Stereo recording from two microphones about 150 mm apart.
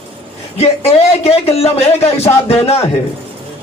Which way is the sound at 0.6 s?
45° left (ahead or behind).